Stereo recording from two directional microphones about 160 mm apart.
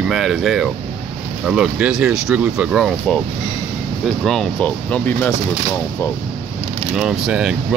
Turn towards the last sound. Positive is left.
turn(degrees=-5)  # may be behind; listen again after turning